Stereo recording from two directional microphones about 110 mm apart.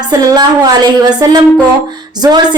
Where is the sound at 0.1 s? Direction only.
35° right (ahead or behind).